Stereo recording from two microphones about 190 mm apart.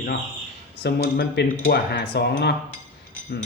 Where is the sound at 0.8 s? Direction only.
55° left (ahead or behind).